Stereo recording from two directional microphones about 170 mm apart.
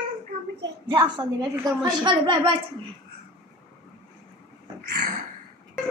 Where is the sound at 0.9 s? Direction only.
25° right (ahead or behind).